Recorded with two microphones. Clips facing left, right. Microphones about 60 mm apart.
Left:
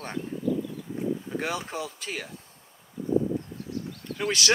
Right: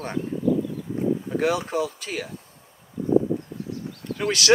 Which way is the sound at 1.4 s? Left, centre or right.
Centre.